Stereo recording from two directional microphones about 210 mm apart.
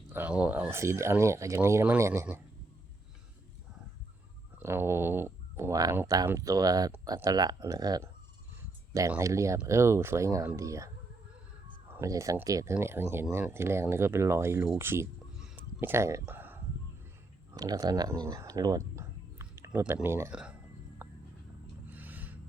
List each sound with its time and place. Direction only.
0.1 s speech: 5° right (ahead or behind)
4.6 s speech: 10° right (ahead or behind)
11.9 s speech: 15° right (ahead or behind)
14.7 s a sound: 10° right (ahead or behind)
17.5 s speech: 20° right (ahead or behind)
21.0 s music: 10° right (ahead or behind)
21.8 s a sound: 10° right (ahead or behind)